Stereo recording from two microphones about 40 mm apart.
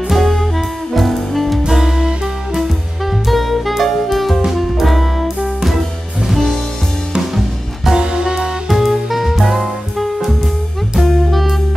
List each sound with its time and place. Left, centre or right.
0.1 s music: centre
1.7 s music: centre
3.3 s saxophone: centre
4.5 s music: centre
6.2 s music: centre
8.0 s music: centre
8.6 s music: centre